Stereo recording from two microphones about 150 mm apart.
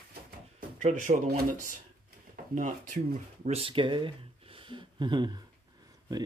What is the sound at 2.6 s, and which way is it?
Speech, 60° right (ahead or behind).